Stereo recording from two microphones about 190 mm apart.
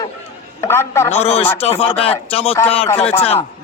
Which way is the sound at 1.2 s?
30° left (ahead or behind).